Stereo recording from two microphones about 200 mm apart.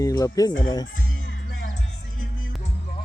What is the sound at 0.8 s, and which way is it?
Music, 45° left (ahead or behind).